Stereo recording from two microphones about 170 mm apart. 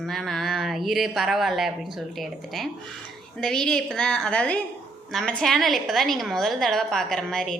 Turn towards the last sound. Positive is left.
turn(degrees=0)  # may be behind; listen again after turning